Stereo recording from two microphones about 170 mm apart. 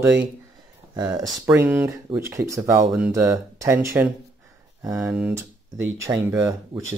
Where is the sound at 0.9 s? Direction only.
25° right (ahead or behind).